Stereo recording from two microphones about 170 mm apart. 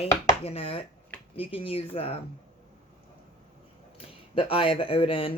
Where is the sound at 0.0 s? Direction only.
35° left (ahead or behind).